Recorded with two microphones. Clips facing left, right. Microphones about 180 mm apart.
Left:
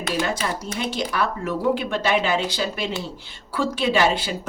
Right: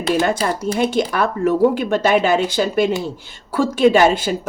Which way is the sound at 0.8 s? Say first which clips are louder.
Right 6 dB; 50° right (ahead or behind).